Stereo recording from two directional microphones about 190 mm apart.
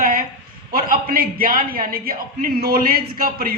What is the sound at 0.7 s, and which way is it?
A man's voice, 50° right (ahead or behind).